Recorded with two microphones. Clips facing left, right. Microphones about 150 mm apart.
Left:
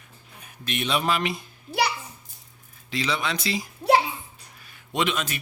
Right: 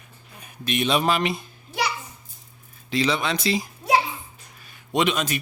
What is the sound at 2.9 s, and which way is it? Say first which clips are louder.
Speech: right 4 dB; 25° right (ahead or behind).